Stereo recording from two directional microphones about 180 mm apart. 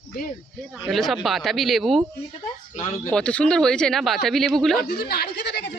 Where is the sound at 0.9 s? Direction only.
Centre (ahead or behind).